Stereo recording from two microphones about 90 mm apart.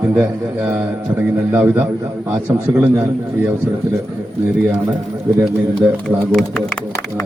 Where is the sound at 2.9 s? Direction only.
30° right (ahead or behind).